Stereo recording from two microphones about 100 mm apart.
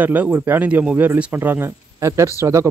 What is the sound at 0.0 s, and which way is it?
Speech, 15° right (ahead or behind).